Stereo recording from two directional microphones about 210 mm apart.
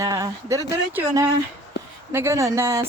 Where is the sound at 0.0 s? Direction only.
15° right (ahead or behind).